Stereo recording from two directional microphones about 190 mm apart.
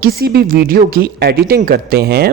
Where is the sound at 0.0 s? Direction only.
55° right (ahead or behind).